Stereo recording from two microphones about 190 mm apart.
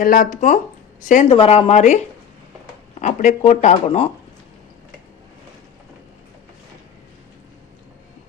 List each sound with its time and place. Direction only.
0.0 s speech: 45° left (ahead or behind)
1.4 s speech: 30° left (ahead or behind)
3.0 s speech: 40° left (ahead or behind)